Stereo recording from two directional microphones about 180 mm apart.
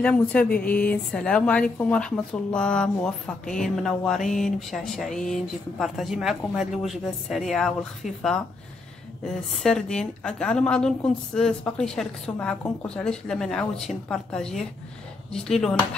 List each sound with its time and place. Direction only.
0.0 s a woman's voice: 10° left (ahead or behind)